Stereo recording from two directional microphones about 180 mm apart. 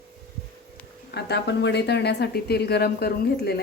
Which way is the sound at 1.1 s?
70° left (ahead or behind).